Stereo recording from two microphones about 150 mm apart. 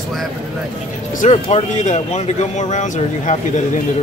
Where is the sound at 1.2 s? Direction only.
45° left (ahead or behind).